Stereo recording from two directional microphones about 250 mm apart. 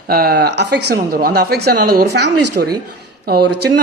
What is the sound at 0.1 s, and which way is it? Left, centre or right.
Speech, right.